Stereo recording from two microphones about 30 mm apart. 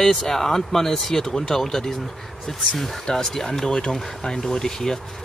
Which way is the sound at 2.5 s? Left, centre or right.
Centre.